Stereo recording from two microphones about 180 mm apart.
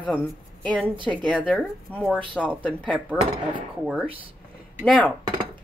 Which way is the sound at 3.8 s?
Centre (ahead or behind).